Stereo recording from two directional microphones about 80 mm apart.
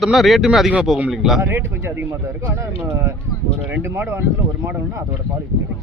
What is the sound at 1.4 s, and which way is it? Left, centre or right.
Speech, right.